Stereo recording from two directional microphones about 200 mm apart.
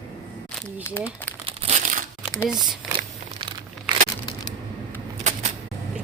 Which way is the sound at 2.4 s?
Centre (ahead or behind).